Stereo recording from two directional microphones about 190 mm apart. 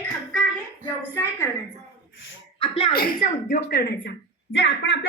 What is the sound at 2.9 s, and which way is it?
Speech, 55° left (ahead or behind).